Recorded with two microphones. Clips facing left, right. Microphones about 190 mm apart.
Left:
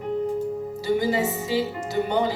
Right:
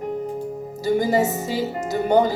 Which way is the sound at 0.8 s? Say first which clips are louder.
Right 4 dB; 45° right (ahead or behind).